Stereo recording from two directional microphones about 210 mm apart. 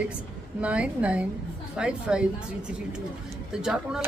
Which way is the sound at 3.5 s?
5° right (ahead or behind).